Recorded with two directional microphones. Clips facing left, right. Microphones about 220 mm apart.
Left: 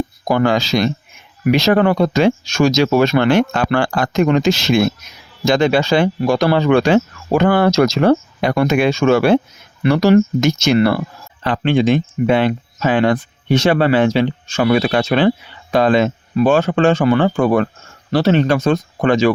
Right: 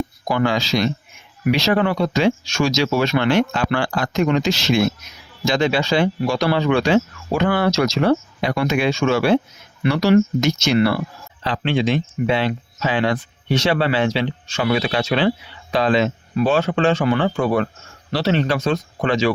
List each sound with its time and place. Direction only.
0.3 s speech: 45° left (ahead or behind)